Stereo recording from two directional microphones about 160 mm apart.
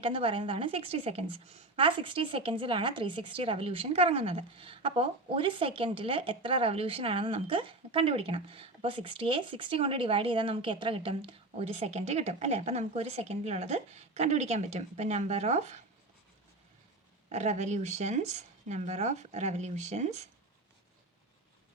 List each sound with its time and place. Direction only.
0.0 s a woman's voice: 35° right (ahead or behind)
17.2 s speech: 45° right (ahead or behind)